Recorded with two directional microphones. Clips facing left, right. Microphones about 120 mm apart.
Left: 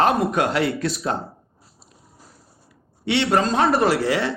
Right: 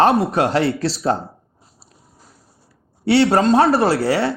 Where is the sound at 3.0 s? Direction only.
35° right (ahead or behind).